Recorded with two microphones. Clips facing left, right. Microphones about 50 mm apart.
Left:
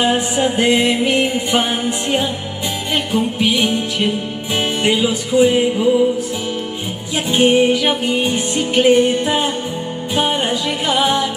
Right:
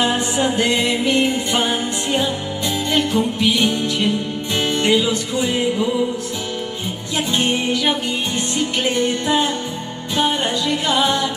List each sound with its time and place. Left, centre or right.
0.0 s music: centre
7.2 s music: centre